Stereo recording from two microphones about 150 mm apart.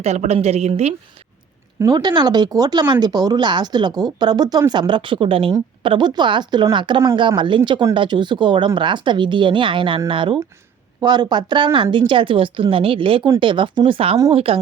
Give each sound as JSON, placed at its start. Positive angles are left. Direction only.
{"t": 0.0, "sound": "a woman's voice", "side_deg": -45}
{"t": 1.8, "sound": "a woman's voice", "side_deg": -30}